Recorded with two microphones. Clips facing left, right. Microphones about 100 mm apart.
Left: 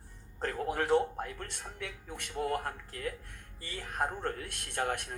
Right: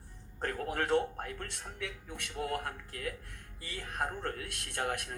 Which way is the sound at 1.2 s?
30° left (ahead or behind).